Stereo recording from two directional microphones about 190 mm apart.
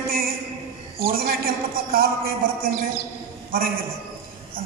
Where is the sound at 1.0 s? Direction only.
50° right (ahead or behind).